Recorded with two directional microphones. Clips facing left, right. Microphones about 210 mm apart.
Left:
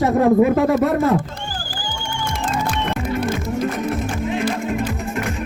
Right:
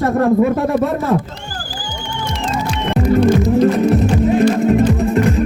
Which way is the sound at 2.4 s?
55° left (ahead or behind).